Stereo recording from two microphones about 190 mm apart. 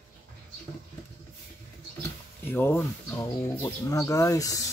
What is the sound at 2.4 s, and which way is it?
Speech, 10° left (ahead or behind).